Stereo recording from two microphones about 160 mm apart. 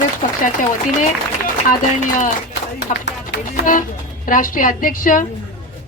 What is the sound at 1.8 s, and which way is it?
Speech, 50° left (ahead or behind).